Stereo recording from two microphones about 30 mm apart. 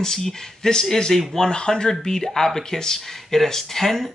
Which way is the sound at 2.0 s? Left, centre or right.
Centre.